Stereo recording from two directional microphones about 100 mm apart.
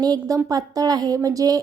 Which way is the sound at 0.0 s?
40° right (ahead or behind).